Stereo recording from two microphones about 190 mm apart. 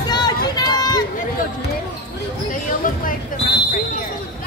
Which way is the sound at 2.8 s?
45° left (ahead or behind).